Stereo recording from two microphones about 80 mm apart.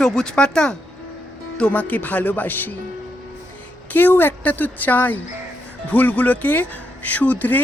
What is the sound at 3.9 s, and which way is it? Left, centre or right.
Speech, left.